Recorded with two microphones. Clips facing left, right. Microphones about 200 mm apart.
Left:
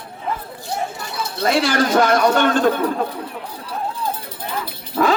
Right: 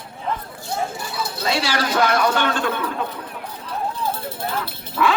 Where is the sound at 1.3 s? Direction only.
50° left (ahead or behind).